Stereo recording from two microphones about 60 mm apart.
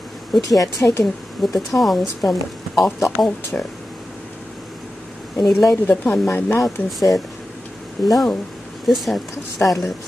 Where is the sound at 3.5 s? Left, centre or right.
Left.